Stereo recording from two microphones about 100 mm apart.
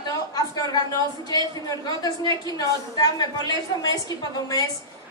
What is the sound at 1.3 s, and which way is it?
A woman's voice, 40° left (ahead or behind).